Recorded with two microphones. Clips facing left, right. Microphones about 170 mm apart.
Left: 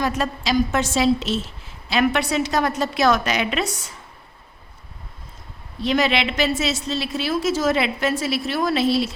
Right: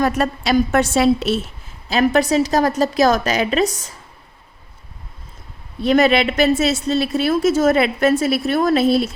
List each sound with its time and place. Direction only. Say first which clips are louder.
0.0 s a woman's voice: right 5 dB; 60° right (ahead or behind)
1.9 s a woman's voice: right 5 dB; 40° right (ahead or behind)
5.8 s a woman's voice: right 6 dB; 50° right (ahead or behind)